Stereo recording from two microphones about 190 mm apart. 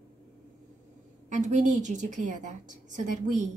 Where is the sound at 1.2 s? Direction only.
40° right (ahead or behind).